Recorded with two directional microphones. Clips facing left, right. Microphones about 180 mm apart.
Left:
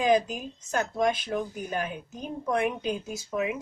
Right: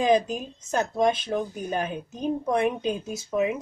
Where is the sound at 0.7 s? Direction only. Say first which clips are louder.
Right 3 dB; 25° right (ahead or behind).